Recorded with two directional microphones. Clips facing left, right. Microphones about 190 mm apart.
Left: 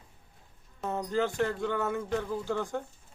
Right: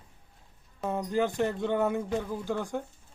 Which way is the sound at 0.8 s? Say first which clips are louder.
Right 2 dB; 15° right (ahead or behind).